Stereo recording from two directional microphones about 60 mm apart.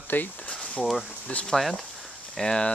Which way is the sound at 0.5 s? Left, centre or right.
Centre.